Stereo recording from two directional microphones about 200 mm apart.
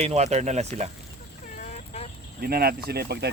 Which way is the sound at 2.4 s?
50° right (ahead or behind).